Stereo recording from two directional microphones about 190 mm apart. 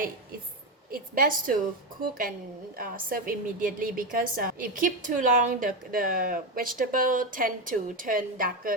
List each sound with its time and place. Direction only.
0.9 s a woman's voice: 50° right (ahead or behind)